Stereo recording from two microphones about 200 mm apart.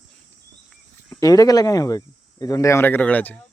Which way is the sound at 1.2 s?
20° left (ahead or behind).